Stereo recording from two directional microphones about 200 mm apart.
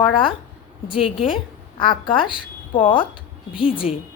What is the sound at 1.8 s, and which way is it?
A woman's voice, 25° left (ahead or behind).